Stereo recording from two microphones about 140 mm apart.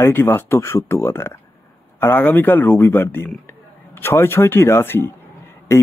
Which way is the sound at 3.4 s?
15° left (ahead or behind).